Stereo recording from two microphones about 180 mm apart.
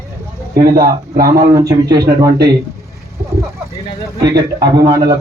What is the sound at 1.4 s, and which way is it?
Speech, 20° right (ahead or behind).